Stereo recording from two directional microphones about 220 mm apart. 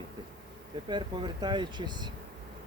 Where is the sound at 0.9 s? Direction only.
20° right (ahead or behind).